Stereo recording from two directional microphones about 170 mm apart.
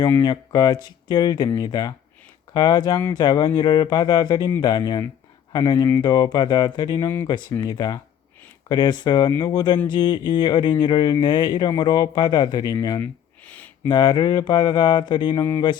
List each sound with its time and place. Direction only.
0.0 s speech: 20° left (ahead or behind)
13.4 s a sound: 10° left (ahead or behind)
13.8 s speech: 25° left (ahead or behind)